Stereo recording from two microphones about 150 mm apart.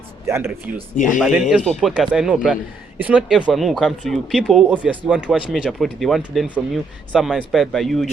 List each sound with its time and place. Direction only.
0.3 s speech: 15° right (ahead or behind)
0.9 s speech: 60° left (ahead or behind)
1.2 s speech: 5° right (ahead or behind)